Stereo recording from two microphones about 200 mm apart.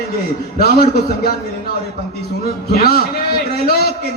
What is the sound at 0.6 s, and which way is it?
Speech, 50° left (ahead or behind).